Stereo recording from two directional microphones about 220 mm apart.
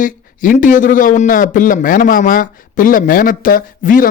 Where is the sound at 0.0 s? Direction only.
40° left (ahead or behind).